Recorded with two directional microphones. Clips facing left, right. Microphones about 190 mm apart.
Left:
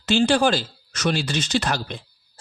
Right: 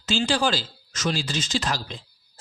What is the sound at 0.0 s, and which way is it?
Speech, 60° left (ahead or behind).